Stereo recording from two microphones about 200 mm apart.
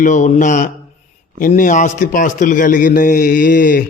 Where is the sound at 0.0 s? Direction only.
40° left (ahead or behind).